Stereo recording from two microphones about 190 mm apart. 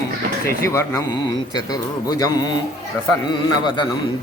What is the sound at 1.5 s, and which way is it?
Speech, 20° left (ahead or behind).